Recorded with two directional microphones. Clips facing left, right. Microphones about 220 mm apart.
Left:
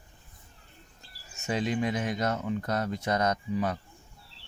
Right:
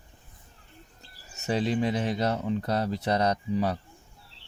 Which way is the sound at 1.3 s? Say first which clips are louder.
Right 3 dB; 35° right (ahead or behind).